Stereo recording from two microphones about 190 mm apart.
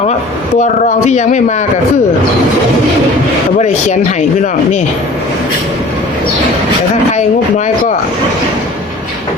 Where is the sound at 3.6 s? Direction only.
40° left (ahead or behind).